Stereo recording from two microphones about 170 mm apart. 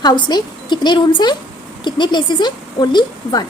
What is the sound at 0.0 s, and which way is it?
A woman's voice, 25° left (ahead or behind).